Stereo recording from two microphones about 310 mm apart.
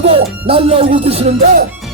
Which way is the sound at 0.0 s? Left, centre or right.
Centre.